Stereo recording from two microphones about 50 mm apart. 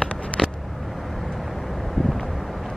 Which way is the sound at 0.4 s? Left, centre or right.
Centre.